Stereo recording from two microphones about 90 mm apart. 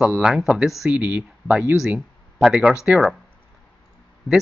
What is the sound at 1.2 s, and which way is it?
Speech, 15° right (ahead or behind).